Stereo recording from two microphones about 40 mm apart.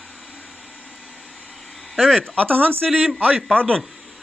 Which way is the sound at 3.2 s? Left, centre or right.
Right.